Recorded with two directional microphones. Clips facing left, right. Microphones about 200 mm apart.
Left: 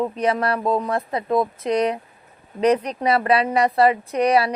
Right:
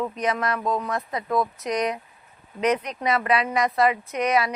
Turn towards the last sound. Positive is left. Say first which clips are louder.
# left 5 dB
turn(degrees=35)  # may be behind; listen again after turning